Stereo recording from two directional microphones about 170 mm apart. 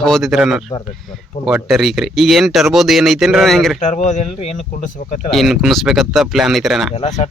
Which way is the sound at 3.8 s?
45° left (ahead or behind).